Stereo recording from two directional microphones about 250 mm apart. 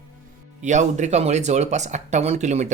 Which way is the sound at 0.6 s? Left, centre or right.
Right.